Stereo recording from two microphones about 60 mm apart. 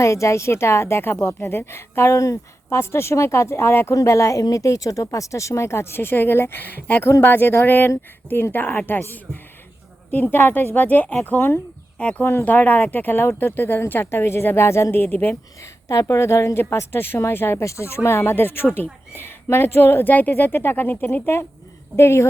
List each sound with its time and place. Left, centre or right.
0.0 s a woman's voice: left
3.9 s a woman's voice: left
11.9 s speech: left
12.2 s a woman's voice: left
12.5 s speech: left
14.9 s speech: left
15.9 s a woman's voice: left
17.6 s a woman's voice: left
20.1 s a woman's voice: left